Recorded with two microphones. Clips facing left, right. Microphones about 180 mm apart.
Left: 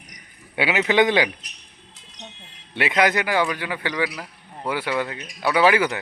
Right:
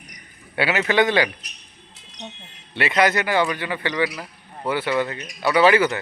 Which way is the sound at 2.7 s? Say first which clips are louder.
Right 1 dB; 15° left (ahead or behind).